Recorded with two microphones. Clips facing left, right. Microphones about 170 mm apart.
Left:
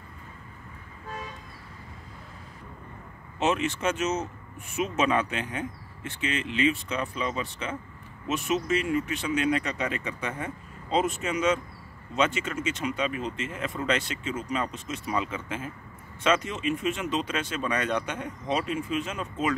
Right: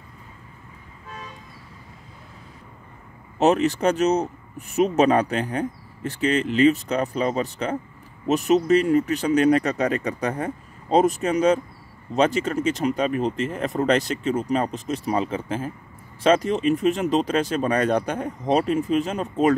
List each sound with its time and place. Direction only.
3.3 s speech: 40° right (ahead or behind)